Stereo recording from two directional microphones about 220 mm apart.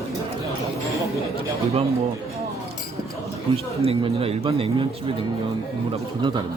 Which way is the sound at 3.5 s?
25° right (ahead or behind).